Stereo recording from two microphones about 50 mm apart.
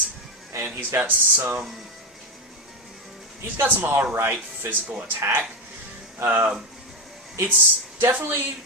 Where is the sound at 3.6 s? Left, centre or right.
Right.